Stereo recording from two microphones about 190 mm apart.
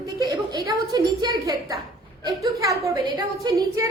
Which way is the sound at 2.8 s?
20° right (ahead or behind).